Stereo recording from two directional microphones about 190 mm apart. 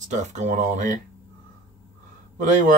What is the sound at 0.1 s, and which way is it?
Speech, 40° right (ahead or behind).